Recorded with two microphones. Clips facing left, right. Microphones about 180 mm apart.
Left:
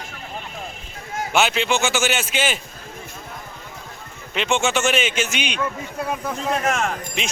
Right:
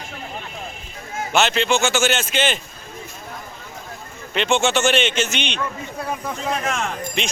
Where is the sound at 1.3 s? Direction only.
10° left (ahead or behind).